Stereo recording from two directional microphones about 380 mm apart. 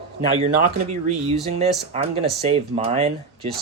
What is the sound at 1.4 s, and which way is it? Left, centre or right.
Speech, centre.